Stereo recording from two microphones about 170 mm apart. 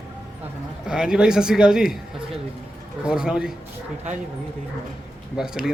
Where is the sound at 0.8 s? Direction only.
5° right (ahead or behind).